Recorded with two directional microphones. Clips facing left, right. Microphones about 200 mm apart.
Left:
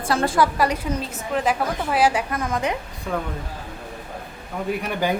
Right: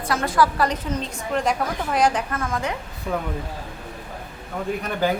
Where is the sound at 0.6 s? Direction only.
10° left (ahead or behind).